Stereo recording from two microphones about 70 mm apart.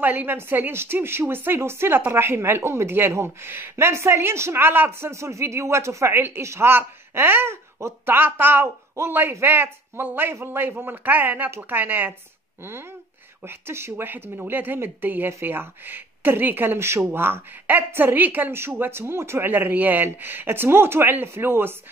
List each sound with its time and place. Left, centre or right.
0.0 s a woman's voice: right
5.1 s a woman's voice: right
13.5 s a woman's voice: right